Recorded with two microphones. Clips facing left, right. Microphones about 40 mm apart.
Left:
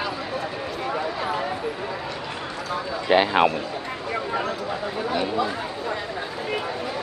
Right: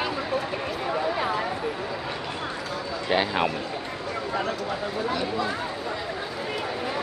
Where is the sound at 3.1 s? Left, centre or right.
Centre.